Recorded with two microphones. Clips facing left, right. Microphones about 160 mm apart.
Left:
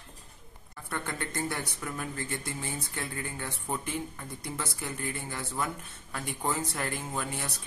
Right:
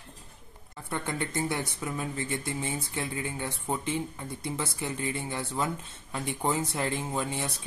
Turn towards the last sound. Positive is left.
turn(degrees=-20)  # may be behind; listen again after turning